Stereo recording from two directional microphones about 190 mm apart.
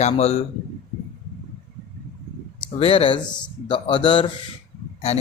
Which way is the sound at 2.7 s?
30° left (ahead or behind).